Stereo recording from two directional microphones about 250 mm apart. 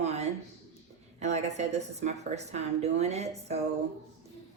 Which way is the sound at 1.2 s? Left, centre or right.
Right.